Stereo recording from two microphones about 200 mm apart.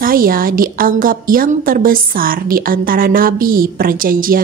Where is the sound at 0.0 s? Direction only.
45° right (ahead or behind).